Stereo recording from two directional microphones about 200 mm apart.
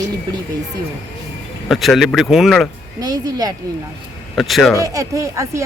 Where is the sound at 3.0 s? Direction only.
20° right (ahead or behind).